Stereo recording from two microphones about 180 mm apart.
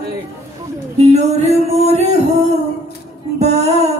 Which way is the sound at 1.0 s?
40° right (ahead or behind).